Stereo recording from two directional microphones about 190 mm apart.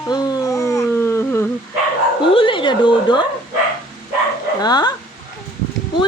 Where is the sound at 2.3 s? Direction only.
25° left (ahead or behind).